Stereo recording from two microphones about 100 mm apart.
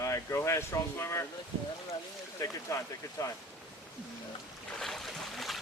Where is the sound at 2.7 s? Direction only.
30° left (ahead or behind).